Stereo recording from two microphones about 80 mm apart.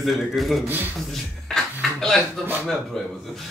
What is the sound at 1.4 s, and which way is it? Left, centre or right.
Music, centre.